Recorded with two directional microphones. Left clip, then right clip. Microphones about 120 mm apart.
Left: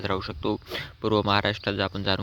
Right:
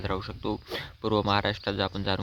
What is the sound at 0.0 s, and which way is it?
Speech, 30° left (ahead or behind).